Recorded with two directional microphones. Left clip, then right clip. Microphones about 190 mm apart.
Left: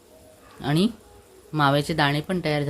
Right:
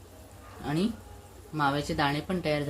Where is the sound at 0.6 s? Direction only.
50° left (ahead or behind).